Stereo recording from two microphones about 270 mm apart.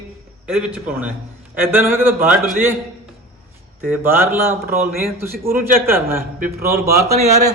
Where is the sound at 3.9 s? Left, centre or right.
Centre.